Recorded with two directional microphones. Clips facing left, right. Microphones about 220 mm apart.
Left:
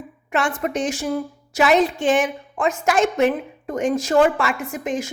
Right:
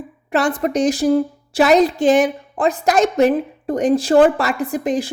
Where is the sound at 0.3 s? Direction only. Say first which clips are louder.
Right 5 dB; 35° right (ahead or behind).